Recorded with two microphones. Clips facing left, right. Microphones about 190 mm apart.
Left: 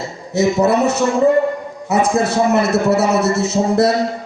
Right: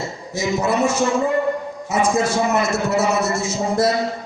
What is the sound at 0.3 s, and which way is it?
A man's voice, 60° left (ahead or behind).